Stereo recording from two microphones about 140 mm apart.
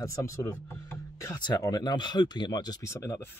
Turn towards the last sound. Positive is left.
turn(degrees=20)  # may be behind; listen again after turning